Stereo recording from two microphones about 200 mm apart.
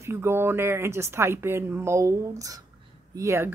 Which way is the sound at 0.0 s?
15° right (ahead or behind).